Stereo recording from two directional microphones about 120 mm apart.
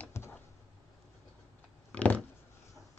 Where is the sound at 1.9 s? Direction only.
10° left (ahead or behind).